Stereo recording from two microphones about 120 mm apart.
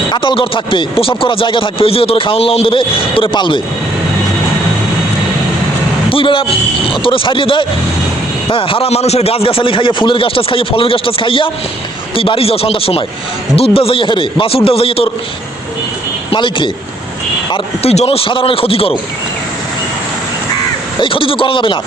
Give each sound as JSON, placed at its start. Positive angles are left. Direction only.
{"t": 0.1, "sound": "speech", "side_deg": 45}
{"t": 6.1, "sound": "speech", "side_deg": 45}
{"t": 16.3, "sound": "speech", "side_deg": 45}
{"t": 17.8, "sound": "speech", "side_deg": 55}
{"t": 21.0, "sound": "speech", "side_deg": 45}